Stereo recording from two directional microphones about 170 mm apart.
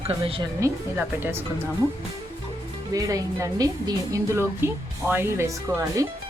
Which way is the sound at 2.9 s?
20° right (ahead or behind).